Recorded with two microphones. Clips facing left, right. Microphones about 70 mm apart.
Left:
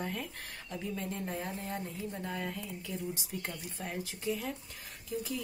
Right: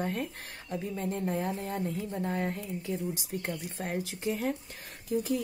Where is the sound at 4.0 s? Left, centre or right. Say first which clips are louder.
Right 3 dB; right.